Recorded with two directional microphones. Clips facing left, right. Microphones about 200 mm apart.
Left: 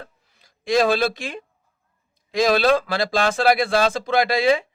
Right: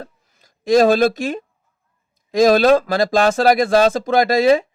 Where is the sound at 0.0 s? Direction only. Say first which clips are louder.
Right 6 dB; 45° right (ahead or behind).